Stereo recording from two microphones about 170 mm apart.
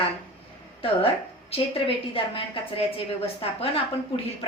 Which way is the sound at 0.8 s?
35° left (ahead or behind).